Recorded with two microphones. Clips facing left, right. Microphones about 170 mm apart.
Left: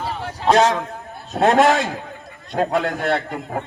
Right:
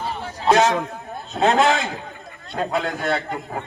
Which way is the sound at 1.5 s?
45° left (ahead or behind).